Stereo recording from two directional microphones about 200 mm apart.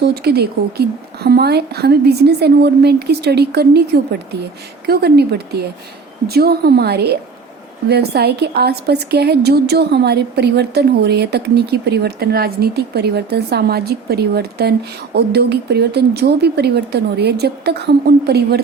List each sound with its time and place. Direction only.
0.0 s a woman's voice: 50° right (ahead or behind)
4.9 s a woman's voice: 55° right (ahead or behind)